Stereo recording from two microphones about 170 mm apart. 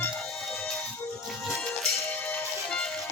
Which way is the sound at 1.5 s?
Centre (ahead or behind).